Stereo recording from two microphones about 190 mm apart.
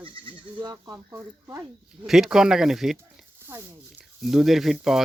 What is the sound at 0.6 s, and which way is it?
Speech, 20° right (ahead or behind).